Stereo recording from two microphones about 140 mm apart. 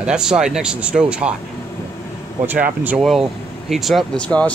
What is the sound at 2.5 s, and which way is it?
Speech, 10° right (ahead or behind).